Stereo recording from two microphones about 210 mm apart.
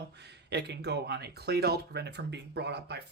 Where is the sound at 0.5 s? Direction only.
55° right (ahead or behind).